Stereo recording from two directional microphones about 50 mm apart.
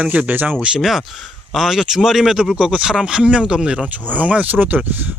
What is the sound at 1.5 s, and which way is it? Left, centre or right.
Speech, centre.